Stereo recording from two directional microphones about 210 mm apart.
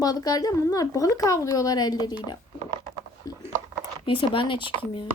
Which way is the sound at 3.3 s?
15° left (ahead or behind).